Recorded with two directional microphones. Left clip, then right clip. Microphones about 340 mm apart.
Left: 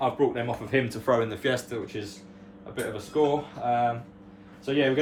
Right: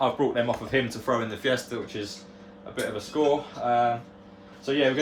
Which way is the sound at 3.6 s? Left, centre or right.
Centre.